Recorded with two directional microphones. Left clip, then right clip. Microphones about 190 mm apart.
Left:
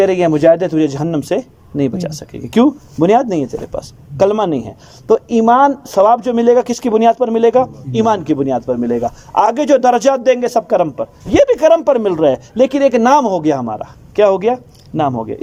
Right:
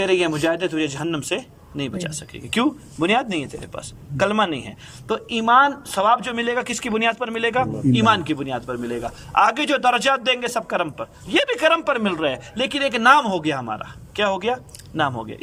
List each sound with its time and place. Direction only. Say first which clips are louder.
0.0 s a man's voice: left 9 dB; 30° left (ahead or behind)